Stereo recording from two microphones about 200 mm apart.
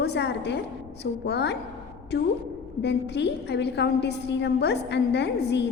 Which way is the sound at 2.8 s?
60° left (ahead or behind).